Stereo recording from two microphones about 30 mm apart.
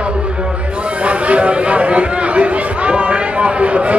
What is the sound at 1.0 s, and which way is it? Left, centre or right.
Chatter, right.